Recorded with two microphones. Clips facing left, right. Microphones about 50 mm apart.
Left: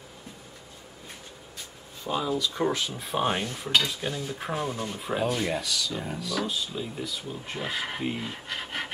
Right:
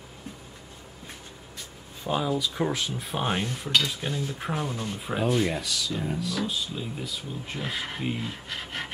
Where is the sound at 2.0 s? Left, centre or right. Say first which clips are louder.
Right 1 dB; centre.